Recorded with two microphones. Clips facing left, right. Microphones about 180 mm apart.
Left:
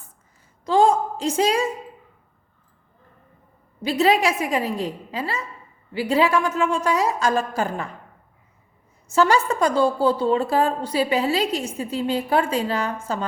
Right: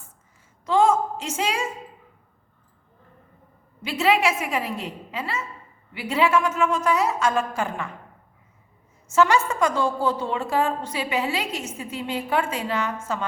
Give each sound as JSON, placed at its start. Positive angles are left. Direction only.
{"t": 0.6, "sound": "a sound", "side_deg": 35}
{"t": 3.8, "sound": "a woman's voice", "side_deg": 35}
{"t": 9.1, "sound": "a woman's voice", "side_deg": 35}